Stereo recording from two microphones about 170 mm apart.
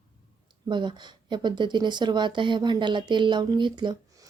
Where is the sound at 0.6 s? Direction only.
25° right (ahead or behind).